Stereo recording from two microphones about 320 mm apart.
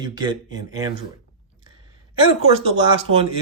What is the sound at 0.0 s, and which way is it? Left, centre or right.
Speech, centre.